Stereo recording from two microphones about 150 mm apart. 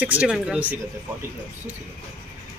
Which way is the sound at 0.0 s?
10° right (ahead or behind).